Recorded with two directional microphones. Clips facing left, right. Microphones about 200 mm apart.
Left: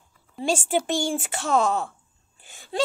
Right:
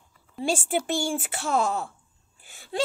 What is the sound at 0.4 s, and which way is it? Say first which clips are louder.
Speech: left 2 dB; centre (ahead or behind).